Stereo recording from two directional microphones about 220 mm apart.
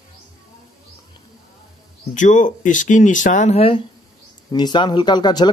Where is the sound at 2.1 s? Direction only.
35° left (ahead or behind).